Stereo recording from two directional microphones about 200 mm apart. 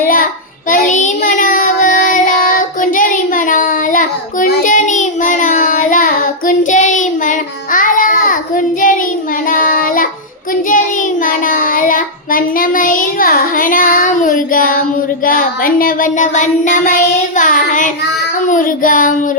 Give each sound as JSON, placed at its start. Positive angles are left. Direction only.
{"t": 0.0, "sound": "child singing", "side_deg": 45}